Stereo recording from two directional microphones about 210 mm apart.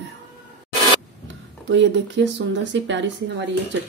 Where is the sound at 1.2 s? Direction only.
60° right (ahead or behind).